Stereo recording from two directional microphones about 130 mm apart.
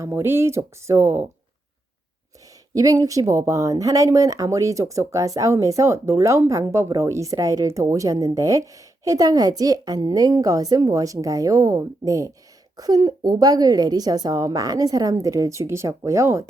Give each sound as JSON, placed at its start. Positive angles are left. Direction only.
{"t": 0.0, "sound": "speech", "side_deg": -20}
{"t": 2.7, "sound": "speech", "side_deg": -25}